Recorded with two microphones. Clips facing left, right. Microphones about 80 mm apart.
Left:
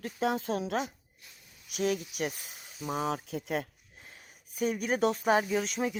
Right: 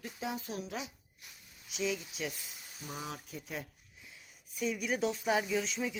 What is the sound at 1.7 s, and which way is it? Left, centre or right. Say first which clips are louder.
Speech: left 5 dB; left.